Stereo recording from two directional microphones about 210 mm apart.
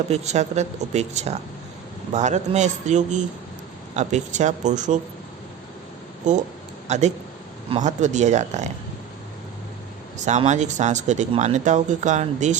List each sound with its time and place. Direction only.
0.1 s speech: 30° right (ahead or behind)
6.3 s speech: 35° right (ahead or behind)
10.2 s speech: 35° right (ahead or behind)